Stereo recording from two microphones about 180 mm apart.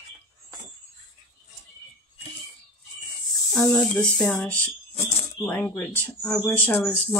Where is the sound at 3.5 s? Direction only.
Centre (ahead or behind).